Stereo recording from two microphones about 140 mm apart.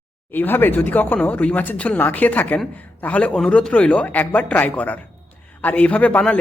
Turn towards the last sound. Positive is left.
turn(degrees=10)  # may be behind; listen again after turning